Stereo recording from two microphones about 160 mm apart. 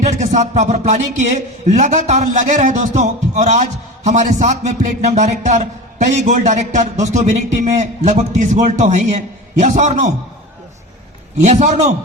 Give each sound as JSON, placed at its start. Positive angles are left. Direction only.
{"t": 0.2, "sound": "a man's voice", "side_deg": -45}
{"t": 11.3, "sound": "a man's voice", "side_deg": -50}